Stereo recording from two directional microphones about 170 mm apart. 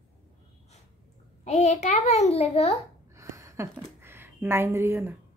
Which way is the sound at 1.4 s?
40° left (ahead or behind).